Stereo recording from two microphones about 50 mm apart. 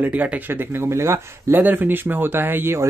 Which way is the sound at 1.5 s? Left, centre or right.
Right.